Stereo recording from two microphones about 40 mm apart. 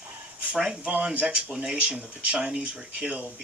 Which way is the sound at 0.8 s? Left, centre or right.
Right.